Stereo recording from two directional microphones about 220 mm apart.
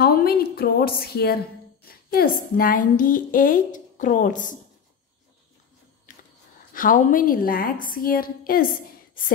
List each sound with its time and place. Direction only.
0.0 s a woman's voice: 45° left (ahead or behind)
6.1 s a sound: 35° left (ahead or behind)
6.7 s a woman's voice: 40° left (ahead or behind)